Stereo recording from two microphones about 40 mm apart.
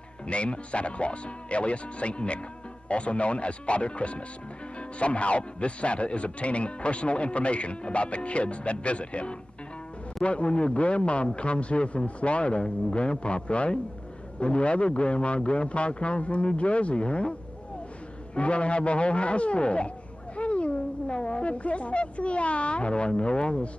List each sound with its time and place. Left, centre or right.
0.3 s a man's voice: left
18.3 s a man's voice: left
20.3 s a sound: left